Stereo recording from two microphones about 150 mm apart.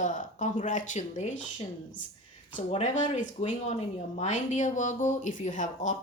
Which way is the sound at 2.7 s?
45° left (ahead or behind).